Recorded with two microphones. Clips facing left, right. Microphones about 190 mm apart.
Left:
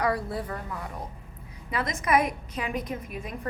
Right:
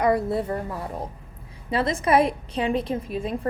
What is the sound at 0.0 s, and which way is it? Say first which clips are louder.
A woman's voice: right 6 dB; 20° right (ahead or behind).